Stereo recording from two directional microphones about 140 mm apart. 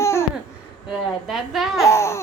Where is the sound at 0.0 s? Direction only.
20° left (ahead or behind).